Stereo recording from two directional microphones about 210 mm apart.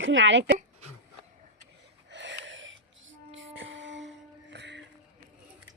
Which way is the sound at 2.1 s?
60° right (ahead or behind).